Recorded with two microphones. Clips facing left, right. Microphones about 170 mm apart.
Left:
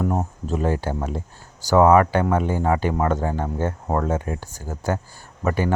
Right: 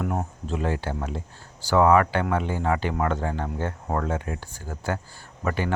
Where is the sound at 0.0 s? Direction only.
40° left (ahead or behind).